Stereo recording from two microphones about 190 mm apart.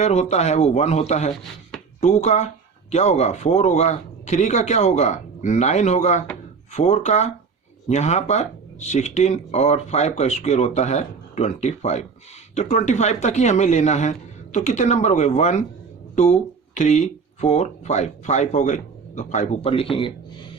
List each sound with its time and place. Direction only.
0.0 s speech: 35° left (ahead or behind)